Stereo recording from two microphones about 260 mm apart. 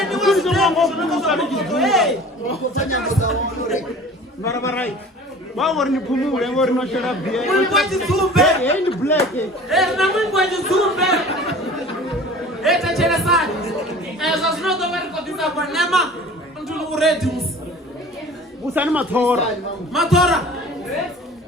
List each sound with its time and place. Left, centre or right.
0.0 s speech: centre
2.5 s speech: left
4.4 s a man's voice: centre
9.6 s a man's voice: centre
12.6 s a man's voice: centre
18.7 s a man's voice: centre